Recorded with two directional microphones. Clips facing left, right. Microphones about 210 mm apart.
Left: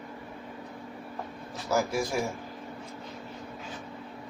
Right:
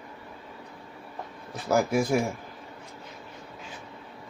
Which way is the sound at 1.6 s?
55° right (ahead or behind).